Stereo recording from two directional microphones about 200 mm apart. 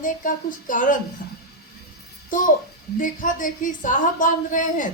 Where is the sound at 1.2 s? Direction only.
45° left (ahead or behind).